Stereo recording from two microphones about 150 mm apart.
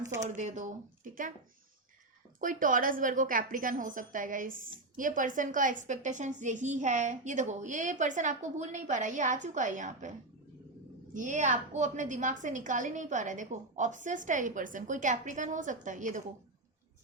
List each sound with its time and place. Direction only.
0.0 s speech: 20° right (ahead or behind)
0.3 s a woman's voice: 55° right (ahead or behind)
2.4 s a woman's voice: 60° right (ahead or behind)